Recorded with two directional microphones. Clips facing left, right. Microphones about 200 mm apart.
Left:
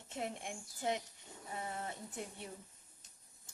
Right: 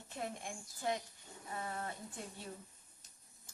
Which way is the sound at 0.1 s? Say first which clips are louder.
Left 1 dB; 20° left (ahead or behind).